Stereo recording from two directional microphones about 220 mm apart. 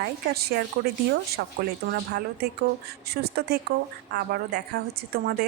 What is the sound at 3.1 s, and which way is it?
Speech, 45° right (ahead or behind).